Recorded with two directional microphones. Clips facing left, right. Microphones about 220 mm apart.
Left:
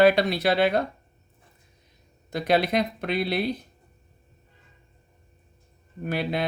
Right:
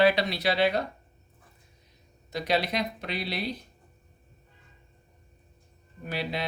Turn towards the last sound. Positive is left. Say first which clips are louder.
# left 5 dB
turn(degrees=55)  # may be behind; listen again after turning